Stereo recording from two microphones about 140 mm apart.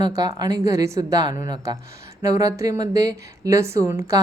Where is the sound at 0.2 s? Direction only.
30° right (ahead or behind).